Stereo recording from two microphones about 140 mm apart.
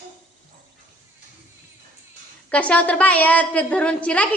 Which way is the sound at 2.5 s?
10° left (ahead or behind).